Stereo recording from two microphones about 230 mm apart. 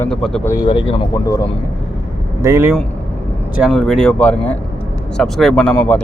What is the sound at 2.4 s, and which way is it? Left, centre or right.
A man's voice, centre.